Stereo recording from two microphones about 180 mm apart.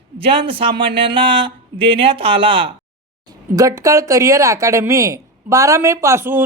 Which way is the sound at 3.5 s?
20° right (ahead or behind).